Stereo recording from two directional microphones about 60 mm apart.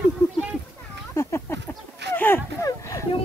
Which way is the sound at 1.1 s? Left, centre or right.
Left.